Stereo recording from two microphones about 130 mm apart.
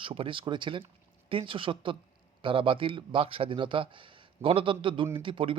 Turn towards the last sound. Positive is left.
turn(degrees=-40)  # may be behind; listen again after turning